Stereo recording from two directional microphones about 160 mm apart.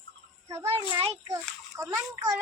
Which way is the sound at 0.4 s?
20° right (ahead or behind).